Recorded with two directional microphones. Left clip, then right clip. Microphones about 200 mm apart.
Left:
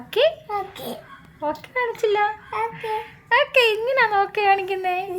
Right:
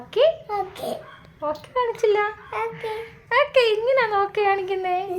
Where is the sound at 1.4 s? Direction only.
Centre (ahead or behind).